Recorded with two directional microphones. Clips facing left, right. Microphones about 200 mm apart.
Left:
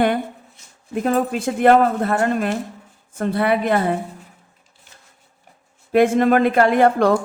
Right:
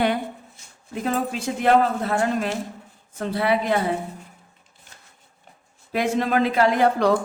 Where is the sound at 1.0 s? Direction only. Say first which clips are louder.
Left 5 dB; 55° left (ahead or behind).